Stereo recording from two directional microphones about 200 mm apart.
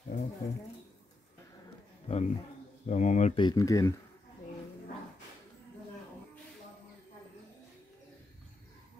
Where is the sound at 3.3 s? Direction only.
20° left (ahead or behind).